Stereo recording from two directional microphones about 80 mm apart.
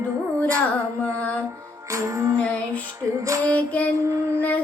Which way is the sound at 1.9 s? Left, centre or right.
Right.